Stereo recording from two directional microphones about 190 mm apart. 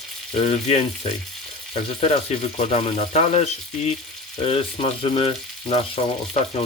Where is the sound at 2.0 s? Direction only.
35° left (ahead or behind).